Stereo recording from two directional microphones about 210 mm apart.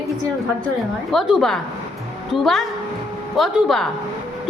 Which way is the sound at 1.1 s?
Centre (ahead or behind).